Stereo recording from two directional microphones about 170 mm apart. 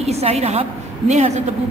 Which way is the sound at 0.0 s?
40° right (ahead or behind).